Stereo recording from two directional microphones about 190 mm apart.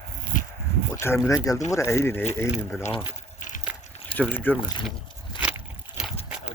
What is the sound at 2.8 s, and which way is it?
Speech, 35° left (ahead or behind).